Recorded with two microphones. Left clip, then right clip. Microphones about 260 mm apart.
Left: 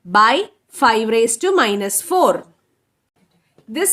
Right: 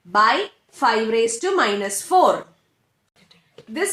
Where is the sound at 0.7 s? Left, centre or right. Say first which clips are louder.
Left 4 dB; left.